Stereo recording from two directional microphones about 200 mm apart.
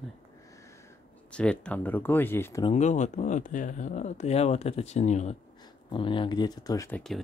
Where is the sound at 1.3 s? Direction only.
5° left (ahead or behind).